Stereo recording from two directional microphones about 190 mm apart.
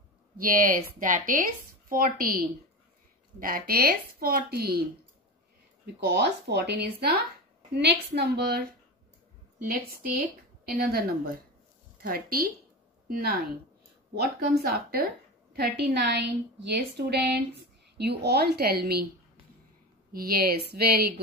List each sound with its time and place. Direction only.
0.4 s speech: 50° right (ahead or behind)
5.9 s a woman's voice: 60° right (ahead or behind)
9.6 s a woman's voice: 50° right (ahead or behind)
20.1 s speech: 50° right (ahead or behind)